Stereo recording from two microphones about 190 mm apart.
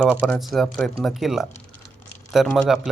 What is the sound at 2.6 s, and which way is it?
Speech, centre (ahead or behind).